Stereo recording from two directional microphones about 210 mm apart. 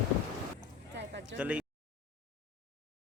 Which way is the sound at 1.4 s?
5° right (ahead or behind).